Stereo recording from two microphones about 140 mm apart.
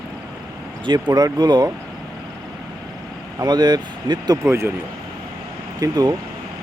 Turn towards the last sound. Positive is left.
turn(degrees=-30)  # may be behind; listen again after turning